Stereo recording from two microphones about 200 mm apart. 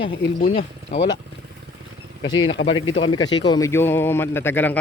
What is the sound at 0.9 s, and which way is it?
Speech, 35° left (ahead or behind).